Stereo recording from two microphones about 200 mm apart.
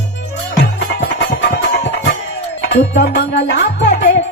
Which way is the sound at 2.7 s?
55° left (ahead or behind).